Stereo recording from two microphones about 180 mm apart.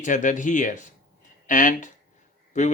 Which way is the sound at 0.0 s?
45° left (ahead or behind).